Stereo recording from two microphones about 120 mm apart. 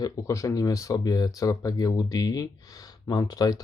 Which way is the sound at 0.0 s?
25° left (ahead or behind).